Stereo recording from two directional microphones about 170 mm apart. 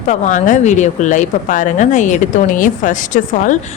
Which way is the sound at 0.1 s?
45° left (ahead or behind).